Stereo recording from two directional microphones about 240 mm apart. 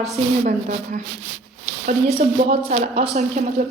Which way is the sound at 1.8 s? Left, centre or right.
Right.